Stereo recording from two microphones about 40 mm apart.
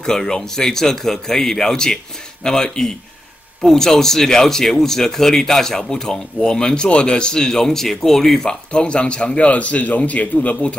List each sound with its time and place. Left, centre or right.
0.0 s speech: centre
8.5 s a man's voice: left